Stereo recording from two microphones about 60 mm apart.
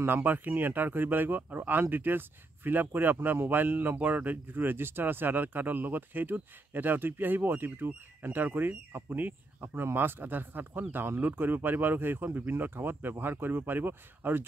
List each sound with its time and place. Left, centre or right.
0.0 s speech: right